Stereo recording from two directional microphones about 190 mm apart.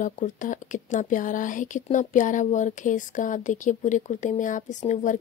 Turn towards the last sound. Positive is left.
turn(degrees=40)  # may be behind; listen again after turning